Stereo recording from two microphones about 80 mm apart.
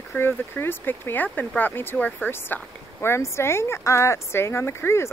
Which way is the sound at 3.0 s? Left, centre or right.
Left.